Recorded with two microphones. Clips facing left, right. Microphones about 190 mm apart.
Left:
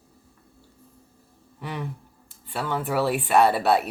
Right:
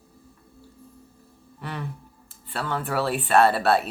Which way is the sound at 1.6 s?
15° left (ahead or behind).